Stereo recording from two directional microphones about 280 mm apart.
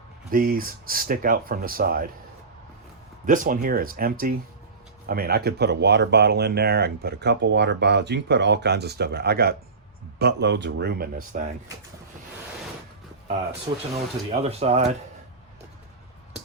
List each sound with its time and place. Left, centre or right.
0.3 s speech: right
3.2 s speech: right
13.7 s speech: centre